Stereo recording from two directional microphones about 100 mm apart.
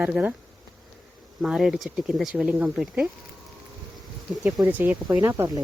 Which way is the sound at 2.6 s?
5° right (ahead or behind).